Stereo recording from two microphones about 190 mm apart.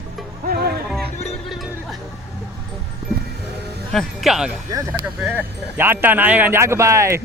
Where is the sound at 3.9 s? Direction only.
Centre (ahead or behind).